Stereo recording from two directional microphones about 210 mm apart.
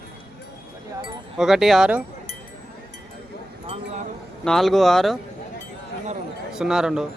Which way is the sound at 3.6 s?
30° right (ahead or behind).